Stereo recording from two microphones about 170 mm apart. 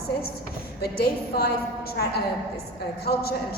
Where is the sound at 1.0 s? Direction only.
65° left (ahead or behind).